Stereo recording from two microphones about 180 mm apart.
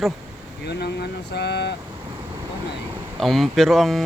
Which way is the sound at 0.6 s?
65° left (ahead or behind).